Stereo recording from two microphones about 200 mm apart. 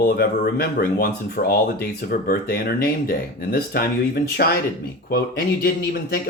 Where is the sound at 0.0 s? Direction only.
50° left (ahead or behind).